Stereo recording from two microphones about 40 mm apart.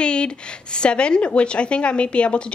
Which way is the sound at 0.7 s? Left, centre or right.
Left.